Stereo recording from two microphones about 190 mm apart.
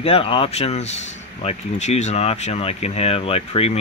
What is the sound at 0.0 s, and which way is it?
Speech, 30° left (ahead or behind).